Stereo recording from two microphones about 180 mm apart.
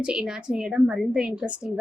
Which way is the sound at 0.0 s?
5° right (ahead or behind).